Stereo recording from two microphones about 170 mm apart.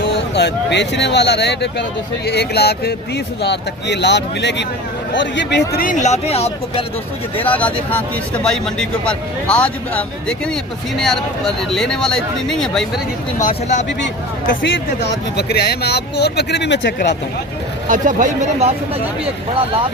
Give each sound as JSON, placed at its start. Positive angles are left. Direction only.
{"t": 0.3, "sound": "speech", "side_deg": 85}
{"t": 3.4, "sound": "speech", "side_deg": 90}
{"t": 5.8, "sound": "speech", "side_deg": 45}
{"t": 7.3, "sound": "speech", "side_deg": 10}
{"t": 13.4, "sound": "speech", "side_deg": 45}
{"t": 14.0, "sound": "speech", "side_deg": 90}
{"t": 15.4, "sound": "speech", "side_deg": 75}
{"t": 17.8, "sound": "speech", "side_deg": -50}